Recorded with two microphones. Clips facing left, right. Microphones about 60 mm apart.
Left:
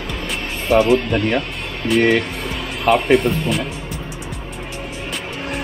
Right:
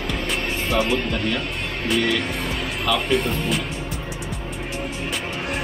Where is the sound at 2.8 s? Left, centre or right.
Left.